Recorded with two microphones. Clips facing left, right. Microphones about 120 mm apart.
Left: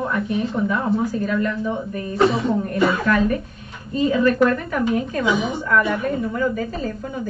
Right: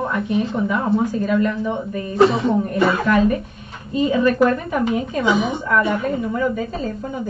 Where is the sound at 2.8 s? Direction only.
30° right (ahead or behind).